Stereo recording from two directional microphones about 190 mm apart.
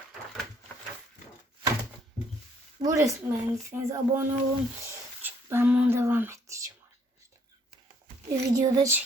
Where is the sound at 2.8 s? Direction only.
15° right (ahead or behind).